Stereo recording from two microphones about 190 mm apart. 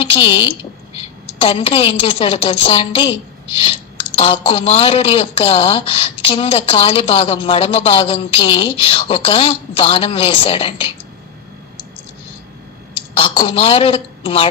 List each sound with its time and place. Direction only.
0.0 s a woman's voice: 25° left (ahead or behind)
12.9 s a woman's voice: 30° left (ahead or behind)